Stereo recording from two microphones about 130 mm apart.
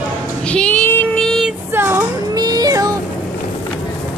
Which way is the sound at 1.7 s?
20° right (ahead or behind).